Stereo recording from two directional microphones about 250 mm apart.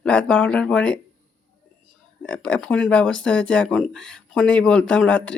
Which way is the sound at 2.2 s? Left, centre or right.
Centre.